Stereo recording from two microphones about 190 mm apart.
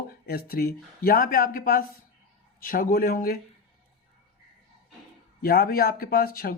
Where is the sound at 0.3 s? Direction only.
50° left (ahead or behind).